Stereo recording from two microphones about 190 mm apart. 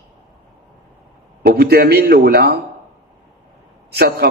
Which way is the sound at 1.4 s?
55° right (ahead or behind).